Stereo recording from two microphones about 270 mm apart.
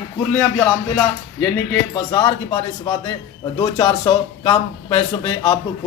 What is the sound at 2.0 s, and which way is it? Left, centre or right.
Speech, centre.